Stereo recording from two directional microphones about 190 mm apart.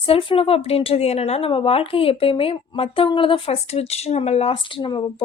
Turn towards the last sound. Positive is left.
turn(degrees=25)  # may be behind; listen again after turning